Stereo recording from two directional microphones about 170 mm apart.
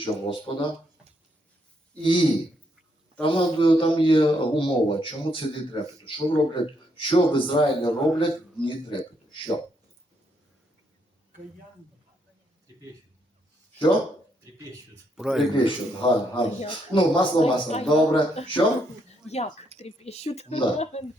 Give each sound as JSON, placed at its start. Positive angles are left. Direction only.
{"t": 0.0, "sound": "speech", "side_deg": 30}
{"t": 2.0, "sound": "a man's voice", "side_deg": 30}
{"t": 15.1, "sound": "speech", "side_deg": 0}
{"t": 15.5, "sound": "a man's voice", "side_deg": 30}
{"t": 19.8, "sound": "a man's voice", "side_deg": 40}